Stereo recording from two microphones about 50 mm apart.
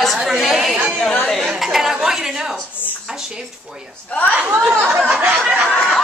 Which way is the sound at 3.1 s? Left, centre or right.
Centre.